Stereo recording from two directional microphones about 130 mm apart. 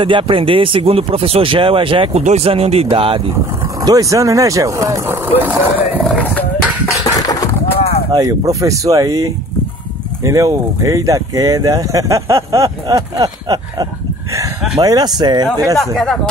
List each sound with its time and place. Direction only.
0.0 s speech: 40° right (ahead or behind)
2.2 s speech: 55° right (ahead or behind)
3.8 s speech: 25° right (ahead or behind)
6.1 s roaring cats: 10° left (ahead or behind)
7.0 s a sound: 25° left (ahead or behind)
8.1 s speech: 25° right (ahead or behind)
15.9 s speech: centre (ahead or behind)